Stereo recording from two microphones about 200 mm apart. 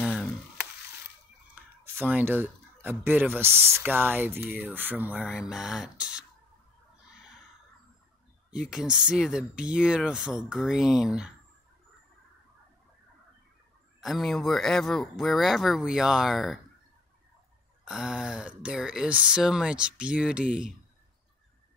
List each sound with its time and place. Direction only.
0.0 s frying: centre (ahead or behind)
1.5 s speech: 10° right (ahead or behind)
8.5 s speech: 5° right (ahead or behind)
14.0 s speech: centre (ahead or behind)
17.8 s speech: 5° right (ahead or behind)